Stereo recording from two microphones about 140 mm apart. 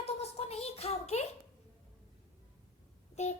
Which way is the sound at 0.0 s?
50° left (ahead or behind).